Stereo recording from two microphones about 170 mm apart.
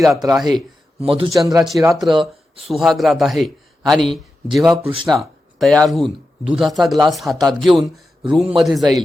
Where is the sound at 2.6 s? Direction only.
Centre (ahead or behind).